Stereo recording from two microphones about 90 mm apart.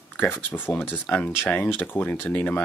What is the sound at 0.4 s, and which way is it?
Speech, 20° left (ahead or behind).